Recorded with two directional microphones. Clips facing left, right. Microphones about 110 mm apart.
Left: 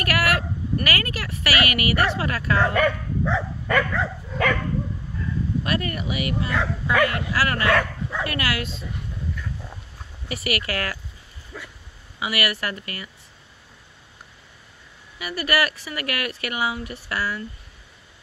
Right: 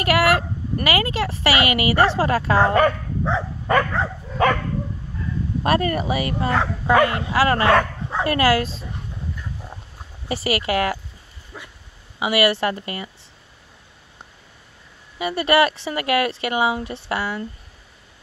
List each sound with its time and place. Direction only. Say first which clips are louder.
0.0 s speech: right 5 dB; 25° right (ahead or behind)
5.6 s speech: right 10 dB; 35° right (ahead or behind)
10.2 s speech: right 5 dB; 30° right (ahead or behind)
15.1 s speech: right 6 dB; 25° right (ahead or behind)